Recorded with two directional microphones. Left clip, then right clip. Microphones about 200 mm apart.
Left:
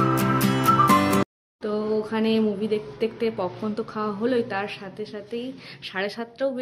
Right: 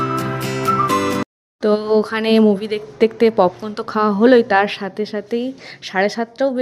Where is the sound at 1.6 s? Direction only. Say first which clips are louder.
Right 10 dB; 45° right (ahead or behind).